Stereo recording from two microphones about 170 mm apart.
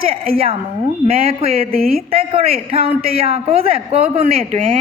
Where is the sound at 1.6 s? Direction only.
60° right (ahead or behind).